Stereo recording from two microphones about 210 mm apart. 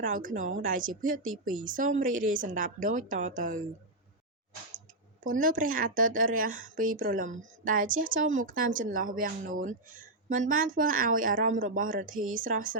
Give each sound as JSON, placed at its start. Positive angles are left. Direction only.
{"t": 0.0, "sound": "a woman's voice", "side_deg": -40}
{"t": 5.2, "sound": "a woman's voice", "side_deg": -40}